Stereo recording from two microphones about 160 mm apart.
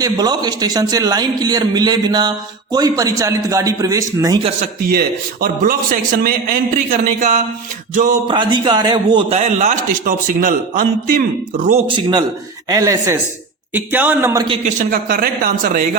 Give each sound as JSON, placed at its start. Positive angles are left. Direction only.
{"t": 0.0, "sound": "a man's voice", "side_deg": -25}
{"t": 4.9, "sound": "a man's voice", "side_deg": -70}
{"t": 8.3, "sound": "a man's voice", "side_deg": -30}
{"t": 9.3, "sound": "a man's voice", "side_deg": -45}
{"t": 11.9, "sound": "a man's voice", "side_deg": -30}
{"t": 14.6, "sound": "a man's voice", "side_deg": -55}